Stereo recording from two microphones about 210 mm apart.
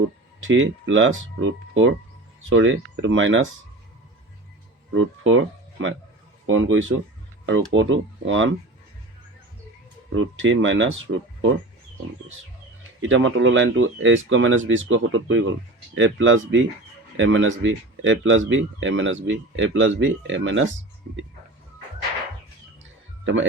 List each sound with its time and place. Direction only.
0.3 s speech: 65° right (ahead or behind)
4.9 s speech: 65° right (ahead or behind)
10.2 s speech: 65° right (ahead or behind)
13.0 s speech: 65° right (ahead or behind)
23.2 s speech: 60° right (ahead or behind)